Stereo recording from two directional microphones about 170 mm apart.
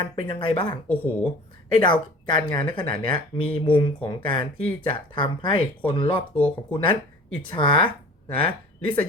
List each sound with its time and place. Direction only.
0.0 s speech: 30° left (ahead or behind)
0.9 s speech: 10° left (ahead or behind)
1.7 s speech: 25° left (ahead or behind)
6.3 s speech: 10° left (ahead or behind)
7.3 s speech: 30° left (ahead or behind)